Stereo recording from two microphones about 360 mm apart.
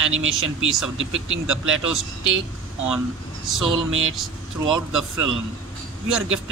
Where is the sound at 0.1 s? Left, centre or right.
Right.